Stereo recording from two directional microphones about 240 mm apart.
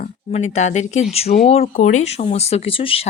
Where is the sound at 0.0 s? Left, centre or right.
Left.